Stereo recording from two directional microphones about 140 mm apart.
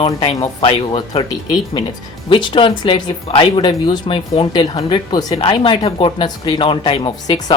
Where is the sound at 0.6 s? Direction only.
40° left (ahead or behind).